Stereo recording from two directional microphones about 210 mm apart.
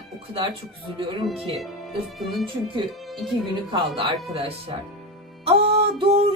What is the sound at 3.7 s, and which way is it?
Speech, 25° right (ahead or behind).